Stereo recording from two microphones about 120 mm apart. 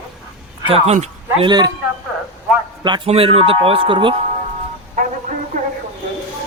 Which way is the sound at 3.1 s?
55° right (ahead or behind).